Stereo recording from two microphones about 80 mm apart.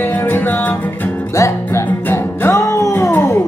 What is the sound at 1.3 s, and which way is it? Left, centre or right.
Music, left.